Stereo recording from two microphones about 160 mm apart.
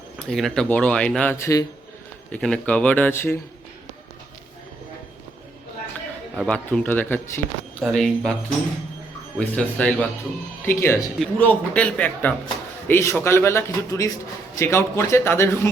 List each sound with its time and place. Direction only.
0.3 s speech: centre (ahead or behind); by 1.6 s 20° left (ahead or behind)
2.3 s speech: 5° left (ahead or behind)
6.3 s speech: 5° left (ahead or behind)
9.6 s speech: 10° left (ahead or behind)